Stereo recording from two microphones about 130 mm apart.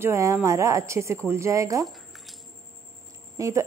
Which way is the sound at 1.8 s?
Centre (ahead or behind).